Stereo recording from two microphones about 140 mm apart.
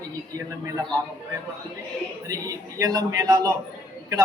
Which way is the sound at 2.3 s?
25° right (ahead or behind).